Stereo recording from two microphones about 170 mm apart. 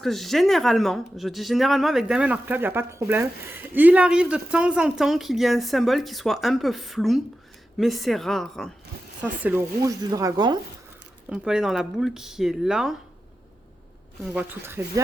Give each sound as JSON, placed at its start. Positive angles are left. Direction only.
{"t": 0.0, "sound": "speech", "side_deg": 0}
{"t": 9.2, "sound": "speech", "side_deg": -10}
{"t": 11.3, "sound": "speech", "side_deg": -5}
{"t": 14.3, "sound": "speech", "side_deg": -15}